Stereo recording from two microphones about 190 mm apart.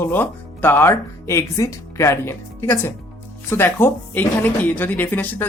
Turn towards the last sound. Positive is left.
turn(degrees=10)  # may be behind; listen again after turning